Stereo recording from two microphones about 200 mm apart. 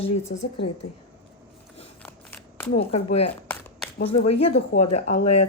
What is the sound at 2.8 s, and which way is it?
Speech, 30° left (ahead or behind).